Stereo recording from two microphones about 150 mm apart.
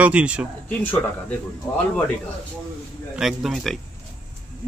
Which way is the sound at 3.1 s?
Centre (ahead or behind).